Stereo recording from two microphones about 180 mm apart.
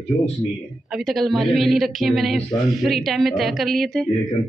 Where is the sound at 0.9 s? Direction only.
Centre (ahead or behind).